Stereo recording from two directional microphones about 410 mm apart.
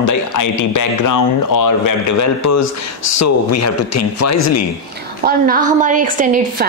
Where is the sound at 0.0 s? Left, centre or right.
Left.